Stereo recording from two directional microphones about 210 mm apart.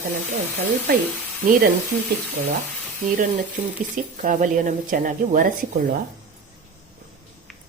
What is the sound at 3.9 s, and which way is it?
Speech, 40° right (ahead or behind).